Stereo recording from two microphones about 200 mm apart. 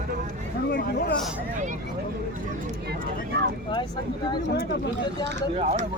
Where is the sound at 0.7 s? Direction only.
55° left (ahead or behind).